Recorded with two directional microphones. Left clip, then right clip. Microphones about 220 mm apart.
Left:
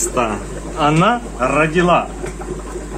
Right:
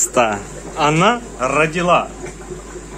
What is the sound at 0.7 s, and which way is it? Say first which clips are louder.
Speech: even; 15° right (ahead or behind).